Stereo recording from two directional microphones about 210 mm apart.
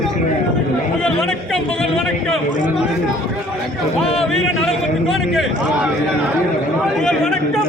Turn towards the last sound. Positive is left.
turn(degrees=5)  # may be behind; listen again after turning